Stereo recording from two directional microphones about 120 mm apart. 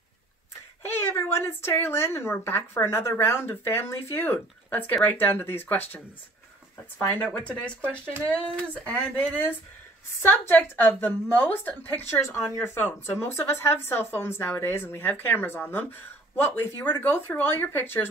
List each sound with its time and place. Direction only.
0.8 s a woman's voice: 20° left (ahead or behind)
7.3 s a woman's voice: 10° left (ahead or behind)
10.2 s a woman's voice: 15° left (ahead or behind)